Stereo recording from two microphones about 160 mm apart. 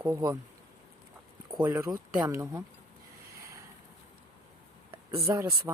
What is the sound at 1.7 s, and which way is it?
Speech, 15° right (ahead or behind).